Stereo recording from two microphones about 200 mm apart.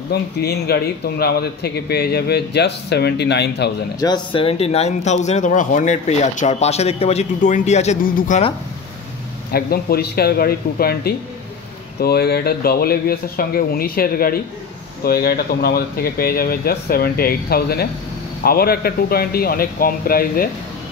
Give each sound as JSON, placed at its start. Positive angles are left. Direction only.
{"t": 0.1, "sound": "a man's voice", "side_deg": 55}
{"t": 4.0, "sound": "speech", "side_deg": 20}
{"t": 9.5, "sound": "a man's voice", "side_deg": 50}